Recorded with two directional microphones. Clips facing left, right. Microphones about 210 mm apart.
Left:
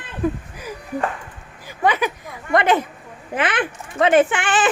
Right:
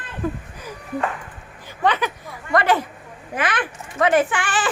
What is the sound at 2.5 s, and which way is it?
A child's voice, 20° left (ahead or behind).